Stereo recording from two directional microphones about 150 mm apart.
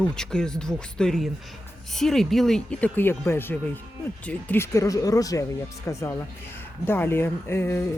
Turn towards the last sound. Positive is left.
turn(degrees=15)  # may be behind; listen again after turning